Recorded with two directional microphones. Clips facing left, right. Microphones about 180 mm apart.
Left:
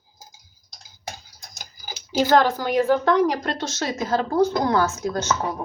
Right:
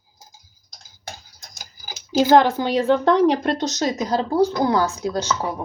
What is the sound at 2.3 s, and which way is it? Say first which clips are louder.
A woman's voice: right 3 dB; 20° right (ahead or behind).